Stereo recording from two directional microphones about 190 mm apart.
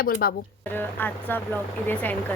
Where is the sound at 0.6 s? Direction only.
10° left (ahead or behind).